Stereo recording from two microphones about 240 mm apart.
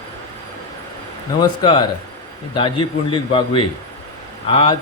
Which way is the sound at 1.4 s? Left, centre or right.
Centre.